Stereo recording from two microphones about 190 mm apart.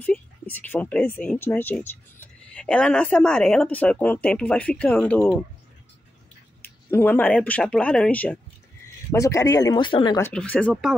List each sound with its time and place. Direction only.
0.0 s speech: 10° left (ahead or behind)
6.9 s speech: 10° left (ahead or behind)
10.2 s speech: 10° left (ahead or behind)